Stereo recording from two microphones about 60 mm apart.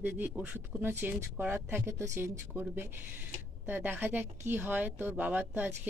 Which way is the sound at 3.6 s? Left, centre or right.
Right.